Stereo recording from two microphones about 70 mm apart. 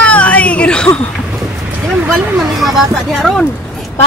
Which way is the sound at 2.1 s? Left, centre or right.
Centre.